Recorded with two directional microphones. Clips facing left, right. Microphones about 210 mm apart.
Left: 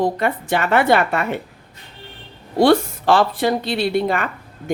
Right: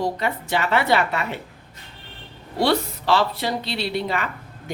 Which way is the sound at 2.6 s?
50° left (ahead or behind).